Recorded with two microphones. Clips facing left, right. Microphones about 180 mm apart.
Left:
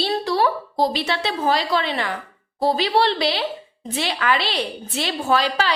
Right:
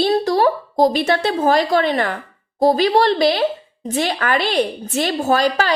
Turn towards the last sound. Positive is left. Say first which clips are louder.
# right 3 dB
turn(degrees=-45)  # may be behind; listen again after turning